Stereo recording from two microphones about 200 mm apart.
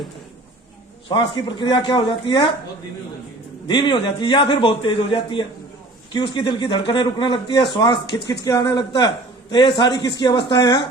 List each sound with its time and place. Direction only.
1.0 s a man's voice: 20° left (ahead or behind)
3.7 s a man's voice: 25° left (ahead or behind)